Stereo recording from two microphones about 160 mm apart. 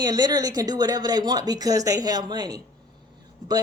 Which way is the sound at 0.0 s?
25° right (ahead or behind).